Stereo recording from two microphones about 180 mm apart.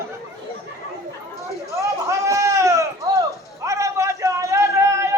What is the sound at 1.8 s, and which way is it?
Sheep, 15° right (ahead or behind).